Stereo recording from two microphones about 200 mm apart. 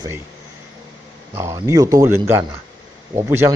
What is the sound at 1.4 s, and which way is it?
Speech, 15° right (ahead or behind).